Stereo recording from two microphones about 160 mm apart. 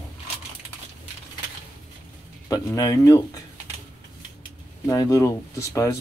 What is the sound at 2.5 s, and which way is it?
Speech, 25° left (ahead or behind).